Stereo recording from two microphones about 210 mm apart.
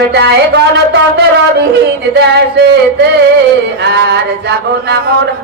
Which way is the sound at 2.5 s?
55° right (ahead or behind).